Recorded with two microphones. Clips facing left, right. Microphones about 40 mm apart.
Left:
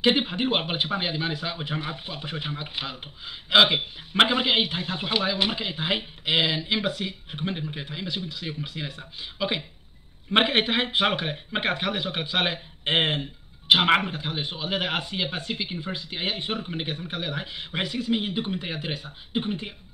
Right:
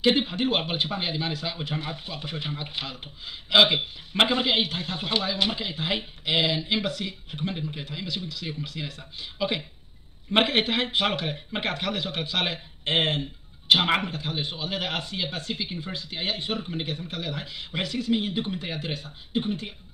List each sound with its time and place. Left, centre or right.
0.0 s a man's voice: left